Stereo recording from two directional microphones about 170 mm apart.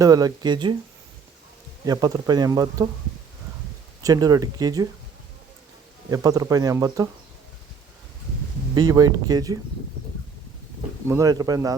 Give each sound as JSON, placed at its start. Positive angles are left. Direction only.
{"t": 0.0, "sound": "speech", "side_deg": -20}
{"t": 1.8, "sound": "speech", "side_deg": -20}
{"t": 4.0, "sound": "speech", "side_deg": -20}
{"t": 6.1, "sound": "speech", "side_deg": -20}
{"t": 8.7, "sound": "speech", "side_deg": -20}
{"t": 11.1, "sound": "speech", "side_deg": -20}